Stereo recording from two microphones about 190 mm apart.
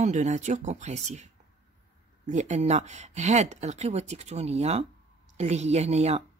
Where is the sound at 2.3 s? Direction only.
40° right (ahead or behind).